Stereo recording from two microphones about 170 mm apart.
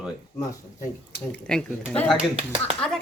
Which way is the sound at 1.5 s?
5° left (ahead or behind).